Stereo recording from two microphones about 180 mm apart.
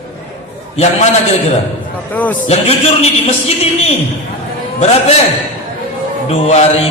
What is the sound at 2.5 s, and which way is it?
Speech, 35° left (ahead or behind).